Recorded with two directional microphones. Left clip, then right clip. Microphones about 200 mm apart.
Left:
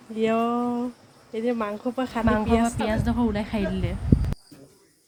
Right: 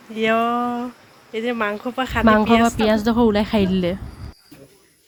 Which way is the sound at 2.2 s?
35° right (ahead or behind).